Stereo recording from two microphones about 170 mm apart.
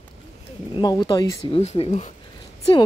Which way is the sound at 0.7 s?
25° left (ahead or behind).